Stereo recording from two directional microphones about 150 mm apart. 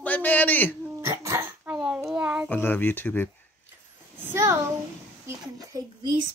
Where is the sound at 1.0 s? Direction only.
15° right (ahead or behind).